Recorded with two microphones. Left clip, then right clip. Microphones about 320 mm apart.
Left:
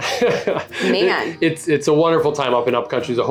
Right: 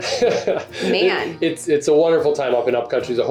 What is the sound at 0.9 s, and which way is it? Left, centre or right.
Speech, centre.